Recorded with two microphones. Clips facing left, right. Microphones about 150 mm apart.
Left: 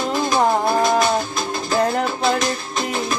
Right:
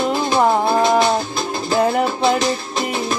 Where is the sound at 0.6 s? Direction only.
25° right (ahead or behind).